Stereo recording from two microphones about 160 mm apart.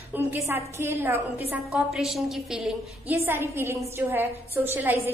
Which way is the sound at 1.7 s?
Centre (ahead or behind).